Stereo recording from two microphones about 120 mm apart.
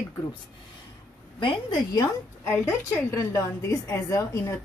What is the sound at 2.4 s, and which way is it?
A woman's voice, 20° left (ahead or behind).